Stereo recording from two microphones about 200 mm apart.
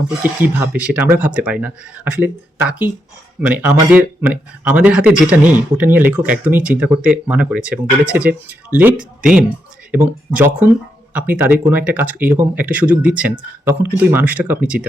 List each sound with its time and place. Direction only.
0.2 s speech: 10° right (ahead or behind)